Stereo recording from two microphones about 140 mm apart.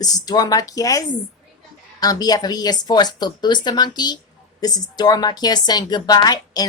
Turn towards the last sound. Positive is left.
turn(degrees=30)  # may be behind; listen again after turning